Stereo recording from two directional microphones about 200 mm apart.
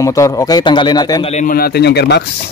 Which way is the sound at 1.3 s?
40° left (ahead or behind).